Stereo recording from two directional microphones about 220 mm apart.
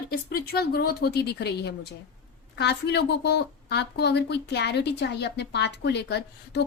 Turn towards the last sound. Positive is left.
turn(degrees=50)  # may be behind; listen again after turning